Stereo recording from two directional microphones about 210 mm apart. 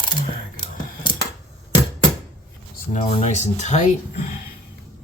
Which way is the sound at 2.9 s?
35° left (ahead or behind).